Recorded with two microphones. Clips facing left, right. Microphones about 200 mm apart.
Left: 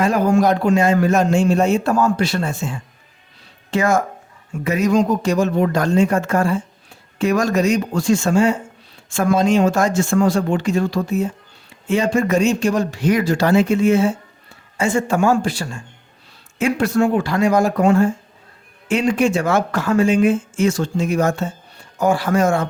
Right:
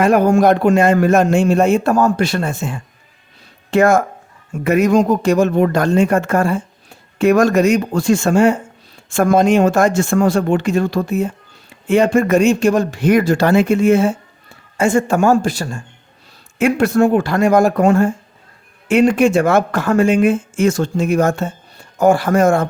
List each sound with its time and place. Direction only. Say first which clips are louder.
0.0 s a man's voice: right 4 dB; 55° right (ahead or behind)
16.6 s speech: right 4 dB; 55° right (ahead or behind)